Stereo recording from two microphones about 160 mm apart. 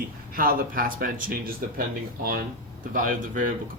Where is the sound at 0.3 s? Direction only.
60° right (ahead or behind).